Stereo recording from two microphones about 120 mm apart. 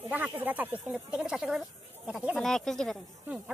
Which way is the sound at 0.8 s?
5° right (ahead or behind).